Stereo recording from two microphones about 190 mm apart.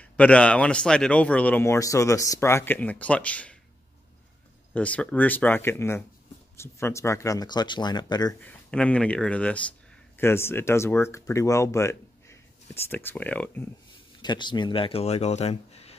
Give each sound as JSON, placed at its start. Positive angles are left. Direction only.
{"t": 0.0, "sound": "speech", "side_deg": 5}
{"t": 4.7, "sound": "speech", "side_deg": 5}
{"t": 8.4, "sound": "speech", "side_deg": 5}
{"t": 14.2, "sound": "speech", "side_deg": 25}